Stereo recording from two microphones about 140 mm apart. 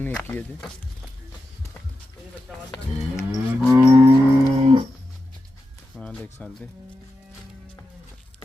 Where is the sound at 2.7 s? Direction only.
25° left (ahead or behind).